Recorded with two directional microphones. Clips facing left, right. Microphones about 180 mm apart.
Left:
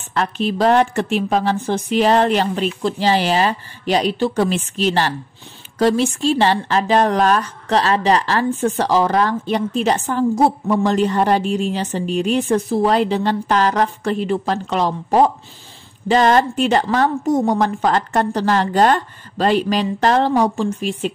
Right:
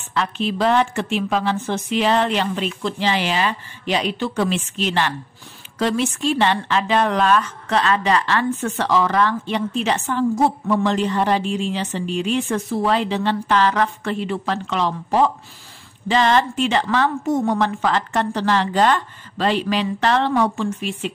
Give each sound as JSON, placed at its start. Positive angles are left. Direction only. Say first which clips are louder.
{"t": 0.1, "sound": "a woman's voice", "louder": "left 2 dB", "side_deg": 45}